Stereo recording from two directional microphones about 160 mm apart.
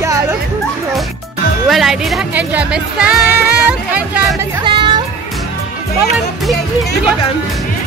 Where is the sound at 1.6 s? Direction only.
Centre (ahead or behind).